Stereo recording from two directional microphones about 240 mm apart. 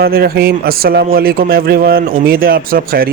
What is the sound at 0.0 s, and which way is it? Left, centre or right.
A man's voice, right.